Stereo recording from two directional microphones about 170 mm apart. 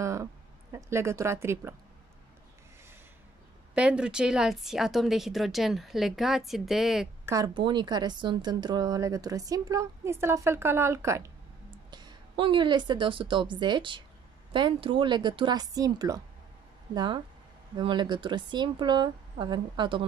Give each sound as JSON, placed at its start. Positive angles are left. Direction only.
{"t": 0.0, "sound": "speech", "side_deg": -20}
{"t": 3.7, "sound": "speech", "side_deg": -5}
{"t": 7.2, "sound": "a woman's voice", "side_deg": -20}